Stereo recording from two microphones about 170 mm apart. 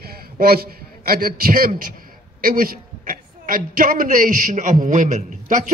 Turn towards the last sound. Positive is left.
turn(degrees=-50)  # may be behind; listen again after turning